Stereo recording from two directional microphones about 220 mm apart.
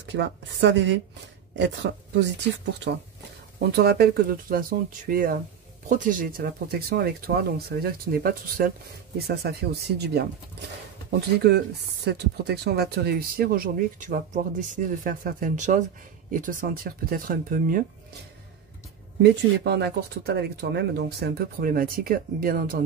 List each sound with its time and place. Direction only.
0.0 s speech: 55° right (ahead or behind)
11.4 s speech: 50° right (ahead or behind)
19.6 s speech: 50° right (ahead or behind)